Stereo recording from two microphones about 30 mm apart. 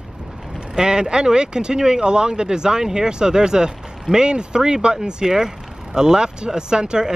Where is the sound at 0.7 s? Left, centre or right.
Right.